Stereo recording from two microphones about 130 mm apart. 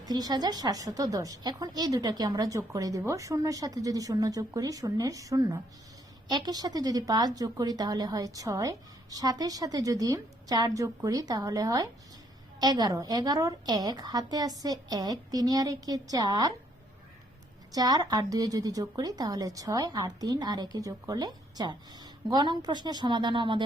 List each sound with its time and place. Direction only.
0.0 s a woman's voice: 30° right (ahead or behind)
17.7 s a woman's voice: 30° right (ahead or behind)